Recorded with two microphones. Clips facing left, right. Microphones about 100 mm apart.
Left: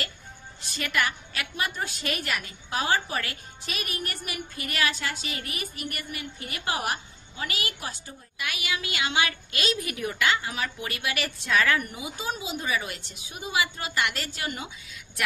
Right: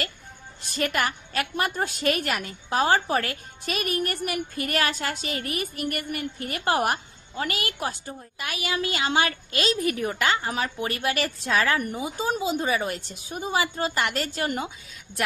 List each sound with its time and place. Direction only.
0.7 s a woman's voice: 45° right (ahead or behind)
8.4 s a woman's voice: 35° right (ahead or behind)